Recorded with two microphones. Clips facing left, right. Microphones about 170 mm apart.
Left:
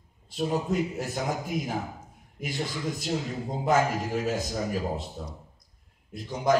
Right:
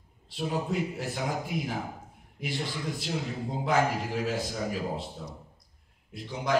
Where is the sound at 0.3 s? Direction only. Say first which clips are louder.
Left 3 dB; 45° left (ahead or behind).